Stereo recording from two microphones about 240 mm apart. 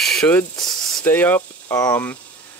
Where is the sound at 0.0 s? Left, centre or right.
Centre.